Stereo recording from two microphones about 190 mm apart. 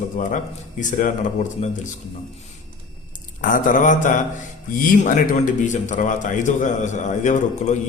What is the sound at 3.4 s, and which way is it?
A man's voice, 45° left (ahead or behind).